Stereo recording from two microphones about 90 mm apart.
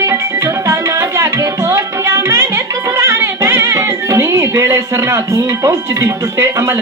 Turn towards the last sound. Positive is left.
turn(degrees=-35)  # may be behind; listen again after turning